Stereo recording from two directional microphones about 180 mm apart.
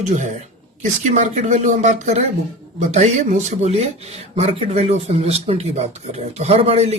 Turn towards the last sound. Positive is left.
turn(degrees=-35)  # may be behind; listen again after turning